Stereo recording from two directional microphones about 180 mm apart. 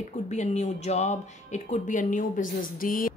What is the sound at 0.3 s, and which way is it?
A woman's voice, 40° left (ahead or behind).